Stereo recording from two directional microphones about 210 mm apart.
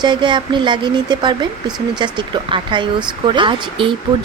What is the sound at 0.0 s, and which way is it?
Speech, 20° right (ahead or behind).